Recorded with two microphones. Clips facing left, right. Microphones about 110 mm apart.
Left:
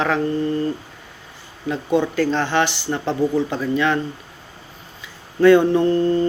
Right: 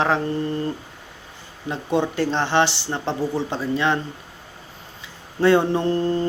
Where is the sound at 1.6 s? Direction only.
25° right (ahead or behind).